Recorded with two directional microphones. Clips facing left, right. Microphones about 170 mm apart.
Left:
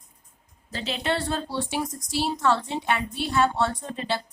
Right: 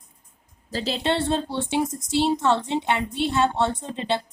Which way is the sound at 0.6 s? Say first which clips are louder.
Right 3 dB; 35° right (ahead or behind).